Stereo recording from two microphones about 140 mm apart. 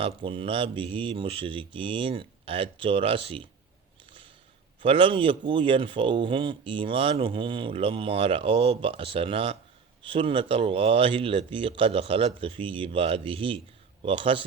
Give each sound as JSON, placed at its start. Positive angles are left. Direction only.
{"t": 0.0, "sound": "speech", "side_deg": -40}
{"t": 4.8, "sound": "speech", "side_deg": -40}